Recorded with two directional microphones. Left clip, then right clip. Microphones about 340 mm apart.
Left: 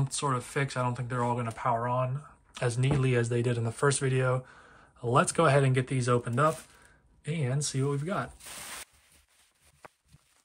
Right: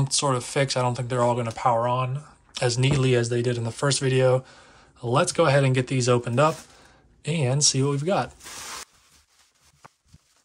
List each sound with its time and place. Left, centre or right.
0.0 s speech: centre